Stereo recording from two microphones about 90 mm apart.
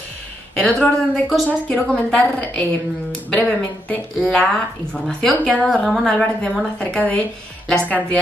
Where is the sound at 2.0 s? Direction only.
15° left (ahead or behind).